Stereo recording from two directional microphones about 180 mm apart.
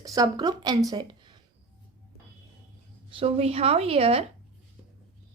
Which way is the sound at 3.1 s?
35° right (ahead or behind).